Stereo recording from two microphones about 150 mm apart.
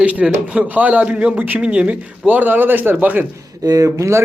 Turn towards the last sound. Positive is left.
turn(degrees=-20)  # may be behind; listen again after turning